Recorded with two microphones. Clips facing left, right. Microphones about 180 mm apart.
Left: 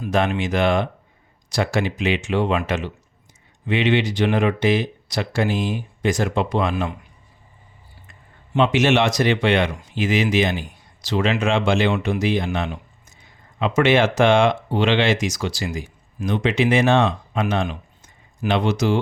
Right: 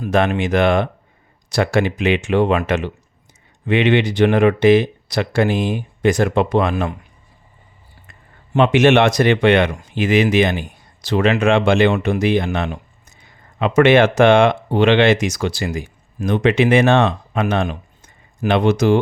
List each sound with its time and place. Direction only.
0.0 s speech: 55° right (ahead or behind)
8.5 s speech: 60° right (ahead or behind)